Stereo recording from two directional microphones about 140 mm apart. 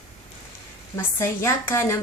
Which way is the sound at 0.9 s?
20° left (ahead or behind).